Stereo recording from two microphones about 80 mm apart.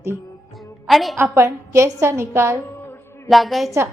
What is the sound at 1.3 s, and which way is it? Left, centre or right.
A woman's voice, right.